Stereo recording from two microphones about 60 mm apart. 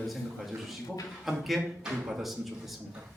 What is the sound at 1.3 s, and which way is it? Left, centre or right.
Speech, centre.